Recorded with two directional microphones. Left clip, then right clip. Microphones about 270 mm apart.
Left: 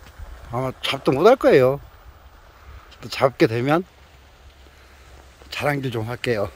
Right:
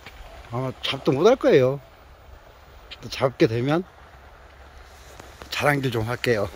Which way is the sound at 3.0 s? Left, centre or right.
Centre.